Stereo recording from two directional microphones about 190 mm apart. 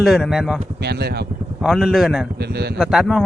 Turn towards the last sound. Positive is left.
turn(degrees=0)  # may be behind; listen again after turning